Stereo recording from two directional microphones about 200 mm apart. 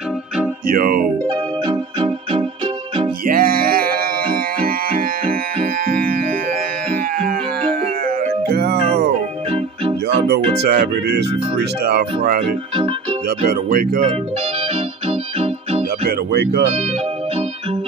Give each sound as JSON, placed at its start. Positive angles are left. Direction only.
{"t": 0.7, "sound": "speech", "side_deg": -45}
{"t": 1.2, "sound": "music", "side_deg": -25}
{"t": 3.3, "sound": "music", "side_deg": -45}
{"t": 8.5, "sound": "music", "side_deg": -50}
{"t": 10.6, "sound": "speech", "side_deg": -50}
{"t": 13.5, "sound": "speech", "side_deg": -45}
{"t": 15.0, "sound": "keyboard", "side_deg": -30}
{"t": 16.1, "sound": "speech", "side_deg": -50}